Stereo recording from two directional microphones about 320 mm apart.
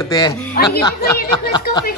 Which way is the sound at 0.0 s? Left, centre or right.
Centre.